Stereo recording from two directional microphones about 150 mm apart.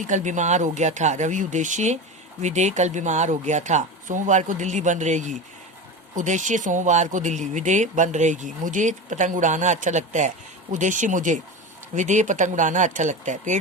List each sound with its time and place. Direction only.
0.0 s speech: 55° right (ahead or behind)